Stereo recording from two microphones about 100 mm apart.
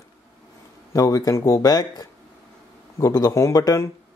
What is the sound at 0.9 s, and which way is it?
Speech, 35° left (ahead or behind).